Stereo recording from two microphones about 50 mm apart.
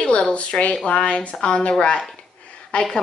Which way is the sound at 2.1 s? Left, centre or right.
Left.